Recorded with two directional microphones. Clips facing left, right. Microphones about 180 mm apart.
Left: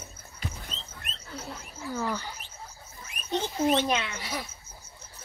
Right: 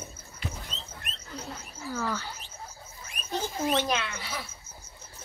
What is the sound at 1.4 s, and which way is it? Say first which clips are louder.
Wild animals: left 1 dB; 20° left (ahead or behind).